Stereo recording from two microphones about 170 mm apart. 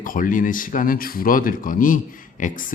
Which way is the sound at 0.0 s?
55° left (ahead or behind).